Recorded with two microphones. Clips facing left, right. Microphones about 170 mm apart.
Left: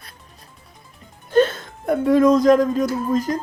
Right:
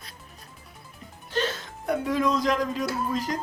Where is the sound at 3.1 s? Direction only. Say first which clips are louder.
Left 8 dB; 45° left (ahead or behind).